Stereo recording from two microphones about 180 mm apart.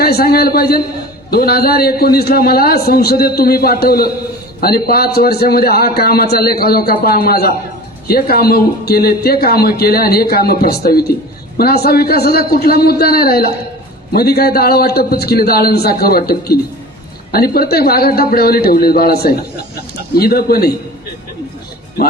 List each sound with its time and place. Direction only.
0.0 s a man's voice: 60° left (ahead or behind)